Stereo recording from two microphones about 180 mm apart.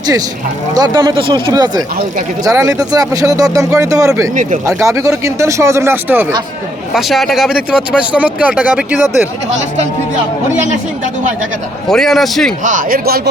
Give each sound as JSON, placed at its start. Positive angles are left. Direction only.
{"t": 0.7, "sound": "speech", "side_deg": -20}
{"t": 6.9, "sound": "speech", "side_deg": 0}
{"t": 11.9, "sound": "speech", "side_deg": 0}
{"t": 12.6, "sound": "speech", "side_deg": -50}